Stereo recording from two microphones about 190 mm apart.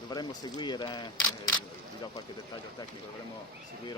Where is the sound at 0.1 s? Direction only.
20° left (ahead or behind).